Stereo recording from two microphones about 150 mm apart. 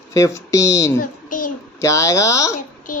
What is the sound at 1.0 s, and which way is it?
Child singing, 65° left (ahead or behind).